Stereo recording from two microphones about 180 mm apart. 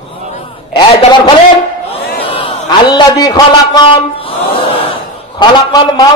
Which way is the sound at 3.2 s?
25° left (ahead or behind).